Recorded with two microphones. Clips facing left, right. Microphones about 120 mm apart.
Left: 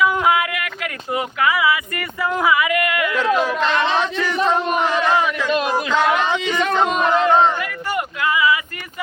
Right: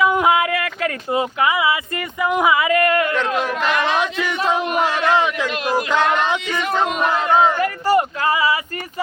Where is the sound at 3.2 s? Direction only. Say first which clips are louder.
Left 3 dB; centre (ahead or behind).